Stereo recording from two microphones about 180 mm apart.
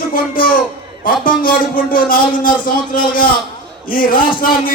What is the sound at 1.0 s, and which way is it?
Speech, 50° left (ahead or behind).